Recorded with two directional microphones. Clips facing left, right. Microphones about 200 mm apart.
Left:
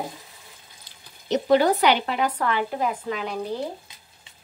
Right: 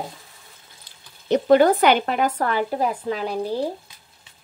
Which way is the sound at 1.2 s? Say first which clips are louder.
Right 4 dB; 55° right (ahead or behind).